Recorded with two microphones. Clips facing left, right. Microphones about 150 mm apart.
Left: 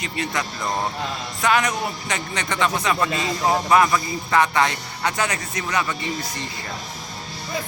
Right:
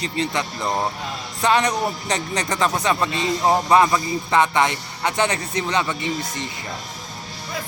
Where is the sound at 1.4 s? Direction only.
30° right (ahead or behind).